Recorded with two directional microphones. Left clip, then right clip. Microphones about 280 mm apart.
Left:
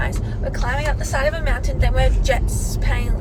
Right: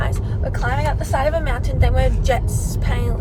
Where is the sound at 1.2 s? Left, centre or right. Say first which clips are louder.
Even; centre.